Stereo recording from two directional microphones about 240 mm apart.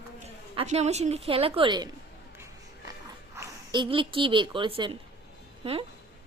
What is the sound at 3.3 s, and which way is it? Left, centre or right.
A woman's voice, centre.